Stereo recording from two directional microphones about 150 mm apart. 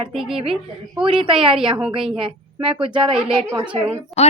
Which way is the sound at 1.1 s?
40° right (ahead or behind).